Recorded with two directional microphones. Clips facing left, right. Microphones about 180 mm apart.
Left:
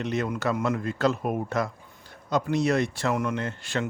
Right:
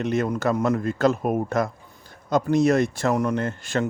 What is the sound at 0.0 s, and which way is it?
Speech, 50° right (ahead or behind).